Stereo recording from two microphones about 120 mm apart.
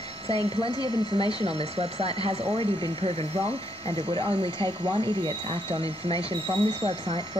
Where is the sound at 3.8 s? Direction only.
45° right (ahead or behind).